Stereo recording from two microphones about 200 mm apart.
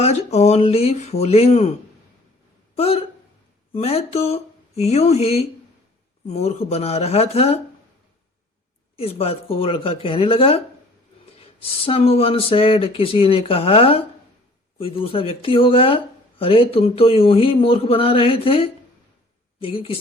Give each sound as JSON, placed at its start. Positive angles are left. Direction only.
{"t": 0.0, "sound": "speech", "side_deg": 35}
{"t": 2.7, "sound": "speech", "side_deg": 30}
{"t": 9.0, "sound": "speech", "side_deg": 30}